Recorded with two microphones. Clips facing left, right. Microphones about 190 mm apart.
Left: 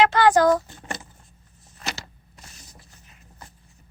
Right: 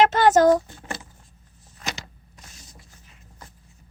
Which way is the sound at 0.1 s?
25° right (ahead or behind).